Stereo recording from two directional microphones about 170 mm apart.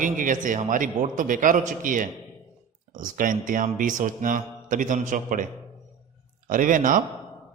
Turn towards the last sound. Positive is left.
turn(degrees=-50)  # may be behind; listen again after turning